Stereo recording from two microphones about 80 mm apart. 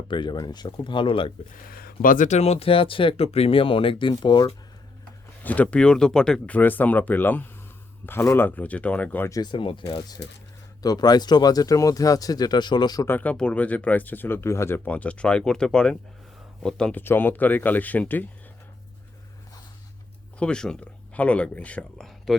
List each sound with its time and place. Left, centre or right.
0.1 s speech: left
2.7 s speech: left
5.4 s speech: centre
6.6 s speech: left
9.4 s speech: left
10.2 s speech: left
10.8 s speech: left
13.1 s speech: left
14.8 s speech: centre
16.9 s speech: left
20.4 s speech: centre
22.3 s speech: centre